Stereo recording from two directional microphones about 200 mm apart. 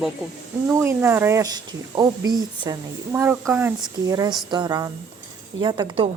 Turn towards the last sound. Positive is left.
turn(degrees=-25)  # may be behind; listen again after turning